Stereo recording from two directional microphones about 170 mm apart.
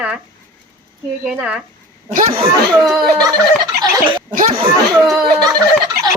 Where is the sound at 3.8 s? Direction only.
30° right (ahead or behind).